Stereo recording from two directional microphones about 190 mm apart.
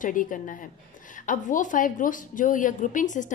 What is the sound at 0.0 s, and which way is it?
A woman's voice, 45° left (ahead or behind).